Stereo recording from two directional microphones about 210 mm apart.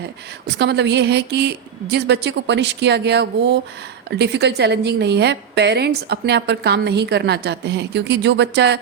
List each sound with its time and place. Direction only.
0.6 s a woman's voice: 55° right (ahead or behind)